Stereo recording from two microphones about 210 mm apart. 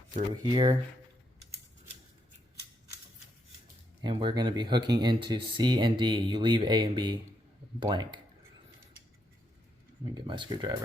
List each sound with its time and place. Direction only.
0.5 s speech: 20° right (ahead or behind)
4.0 s speech: 20° right (ahead or behind)
10.2 s speech: 25° right (ahead or behind)